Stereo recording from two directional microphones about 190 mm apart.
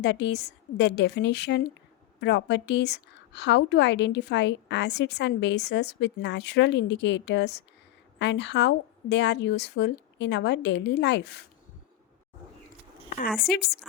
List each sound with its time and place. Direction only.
0.0 s a woman's voice: 65° left (ahead or behind)
13.1 s zipper: 45° left (ahead or behind)